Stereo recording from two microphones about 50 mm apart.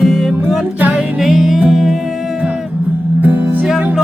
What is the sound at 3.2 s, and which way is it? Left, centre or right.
Music, right.